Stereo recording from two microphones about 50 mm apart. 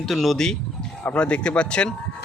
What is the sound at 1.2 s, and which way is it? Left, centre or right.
Speech, left.